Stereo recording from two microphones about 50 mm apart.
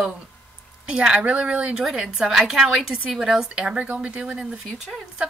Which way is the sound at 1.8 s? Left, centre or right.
Centre.